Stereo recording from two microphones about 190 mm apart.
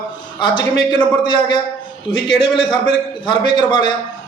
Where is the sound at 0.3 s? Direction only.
25° left (ahead or behind).